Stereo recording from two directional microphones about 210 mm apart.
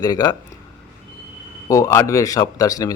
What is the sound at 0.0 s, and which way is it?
Speech, 20° left (ahead or behind).